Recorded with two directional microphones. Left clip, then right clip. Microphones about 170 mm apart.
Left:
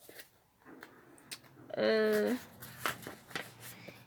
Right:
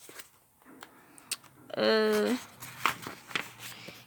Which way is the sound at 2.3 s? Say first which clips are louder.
Right 4 dB; 40° right (ahead or behind).